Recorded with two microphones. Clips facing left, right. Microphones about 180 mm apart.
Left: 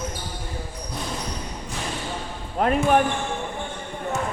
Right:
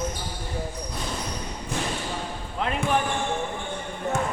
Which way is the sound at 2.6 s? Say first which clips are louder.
Left 6 dB; 50° left (ahead or behind).